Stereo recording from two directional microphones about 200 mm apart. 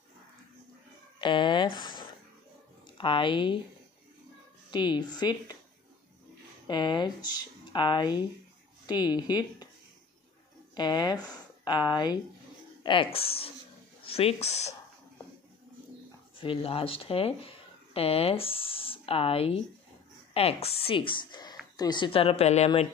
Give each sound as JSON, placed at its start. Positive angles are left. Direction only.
{"t": 1.2, "sound": "speech", "side_deg": 25}
{"t": 4.6, "sound": "speech", "side_deg": 20}
{"t": 6.7, "sound": "speech", "side_deg": 20}
{"t": 10.8, "sound": "speech", "side_deg": 20}
{"t": 16.3, "sound": "speech", "side_deg": 25}